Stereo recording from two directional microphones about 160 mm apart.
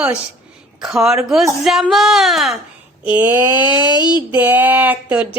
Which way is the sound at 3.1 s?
10° right (ahead or behind).